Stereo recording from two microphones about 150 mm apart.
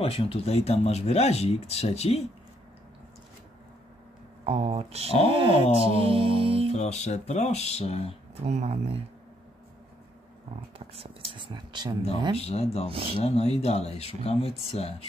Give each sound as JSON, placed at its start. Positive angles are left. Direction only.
{"t": 0.0, "sound": "speech", "side_deg": 40}
{"t": 4.5, "sound": "speech", "side_deg": -45}
{"t": 6.7, "sound": "speech", "side_deg": 50}
{"t": 8.4, "sound": "speech", "side_deg": -45}
{"t": 11.3, "sound": "speech", "side_deg": -30}
{"t": 12.4, "sound": "speech", "side_deg": 40}